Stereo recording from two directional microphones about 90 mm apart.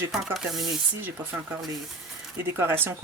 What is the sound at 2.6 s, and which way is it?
Speech, 25° right (ahead or behind).